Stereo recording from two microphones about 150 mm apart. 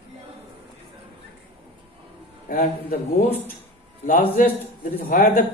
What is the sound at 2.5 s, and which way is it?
Speech, 60° left (ahead or behind).